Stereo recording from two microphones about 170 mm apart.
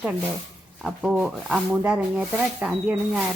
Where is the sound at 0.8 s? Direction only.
5° right (ahead or behind).